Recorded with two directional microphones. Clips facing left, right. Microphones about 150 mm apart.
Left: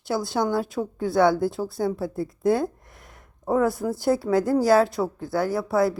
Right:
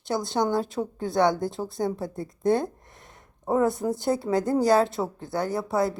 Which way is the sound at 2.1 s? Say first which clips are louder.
Even; 5° left (ahead or behind).